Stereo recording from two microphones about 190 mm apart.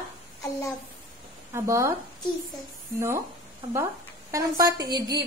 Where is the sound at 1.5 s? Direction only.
15° right (ahead or behind).